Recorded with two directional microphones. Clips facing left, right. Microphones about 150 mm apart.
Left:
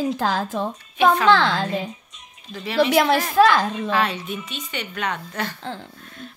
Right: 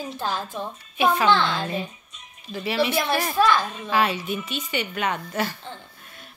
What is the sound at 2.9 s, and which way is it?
Speech, 90° left.